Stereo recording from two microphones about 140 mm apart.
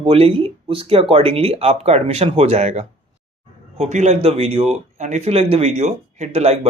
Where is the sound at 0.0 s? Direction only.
40° right (ahead or behind).